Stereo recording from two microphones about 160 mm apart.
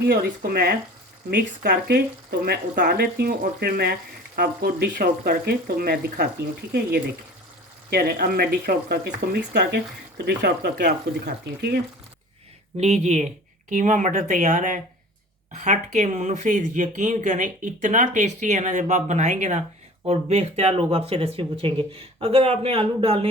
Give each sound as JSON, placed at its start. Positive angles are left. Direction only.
{"t": 0.0, "sound": "speech", "side_deg": -70}
{"t": 1.3, "sound": "speech", "side_deg": -80}
{"t": 7.9, "sound": "speech", "side_deg": -75}
{"t": 12.7, "sound": "speech", "side_deg": -45}